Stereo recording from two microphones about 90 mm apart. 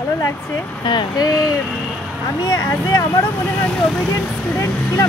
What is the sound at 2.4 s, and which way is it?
Speech, 40° left (ahead or behind).